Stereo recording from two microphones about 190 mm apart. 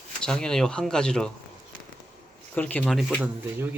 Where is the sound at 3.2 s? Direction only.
10° right (ahead or behind).